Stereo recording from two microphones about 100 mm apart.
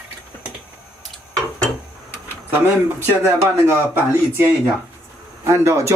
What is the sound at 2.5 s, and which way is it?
Speech, 20° right (ahead or behind).